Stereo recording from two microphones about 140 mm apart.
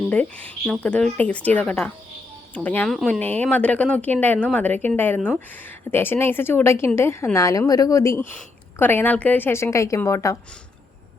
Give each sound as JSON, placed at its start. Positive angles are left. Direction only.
{"t": 0.1, "sound": "speech", "side_deg": 10}
{"t": 2.9, "sound": "speech", "side_deg": 0}
{"t": 3.2, "sound": "speech", "side_deg": 10}